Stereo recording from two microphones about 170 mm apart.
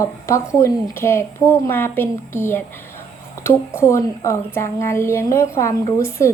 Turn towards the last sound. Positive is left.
turn(degrees=15)  # may be behind; listen again after turning